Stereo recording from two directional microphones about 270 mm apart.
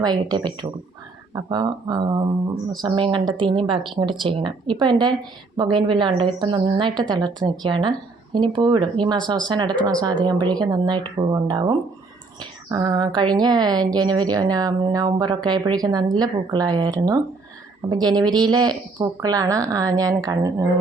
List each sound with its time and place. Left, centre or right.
0.0 s speech: centre